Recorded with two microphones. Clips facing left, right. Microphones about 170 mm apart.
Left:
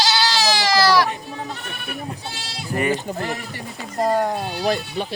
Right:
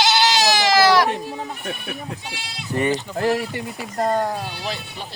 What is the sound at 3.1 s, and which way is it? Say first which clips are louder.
Speech: even; 50° left (ahead or behind).